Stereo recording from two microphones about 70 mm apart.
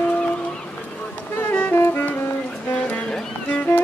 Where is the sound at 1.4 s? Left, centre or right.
Left.